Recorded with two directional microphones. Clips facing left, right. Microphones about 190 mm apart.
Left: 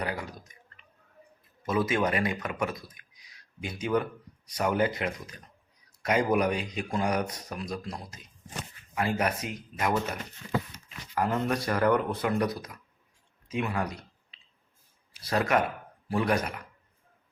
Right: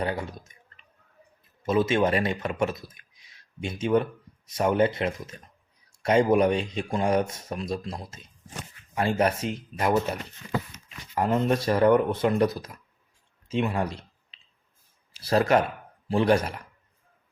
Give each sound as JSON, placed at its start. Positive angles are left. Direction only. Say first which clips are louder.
{"t": 0.0, "sound": "clicking", "louder": "right 4 dB", "side_deg": -25}
{"t": 1.6, "sound": "speech", "louder": "right 4 dB", "side_deg": -25}
{"t": 11.1, "sound": "speech", "louder": "right 4 dB", "side_deg": -25}
{"t": 15.1, "sound": "speech", "louder": "right 5 dB", "side_deg": -30}